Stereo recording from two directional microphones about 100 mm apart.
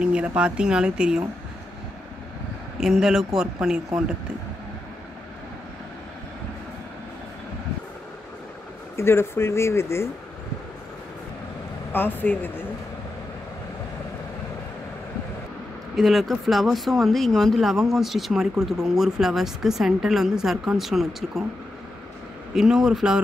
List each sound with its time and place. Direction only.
0.0 s speech: 10° right (ahead or behind)
2.8 s speech: 5° right (ahead or behind)
8.9 s speech: 25° left (ahead or behind)
11.9 s speech: 20° left (ahead or behind)
16.0 s speech: centre (ahead or behind)
22.5 s speech: 5° right (ahead or behind)